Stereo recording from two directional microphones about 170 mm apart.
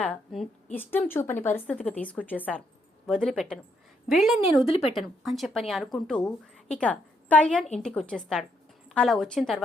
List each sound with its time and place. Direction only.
0.0 s a woman's voice: 5° left (ahead or behind)
4.5 s a woman's voice: 35° left (ahead or behind)
4.9 s a woman's voice: centre (ahead or behind)